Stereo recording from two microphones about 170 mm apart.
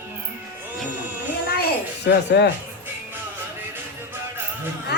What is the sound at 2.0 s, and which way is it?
Speech, 85° left.